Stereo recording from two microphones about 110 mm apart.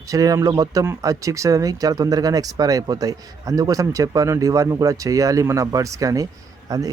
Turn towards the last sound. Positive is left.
turn(degrees=-35)  # may be behind; listen again after turning